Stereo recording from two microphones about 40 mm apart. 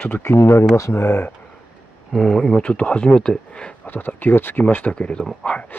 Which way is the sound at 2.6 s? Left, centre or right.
Left.